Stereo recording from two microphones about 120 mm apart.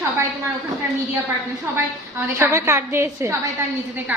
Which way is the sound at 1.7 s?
20° right (ahead or behind).